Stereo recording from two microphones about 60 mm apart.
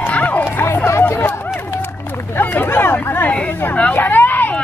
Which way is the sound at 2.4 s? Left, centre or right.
Left.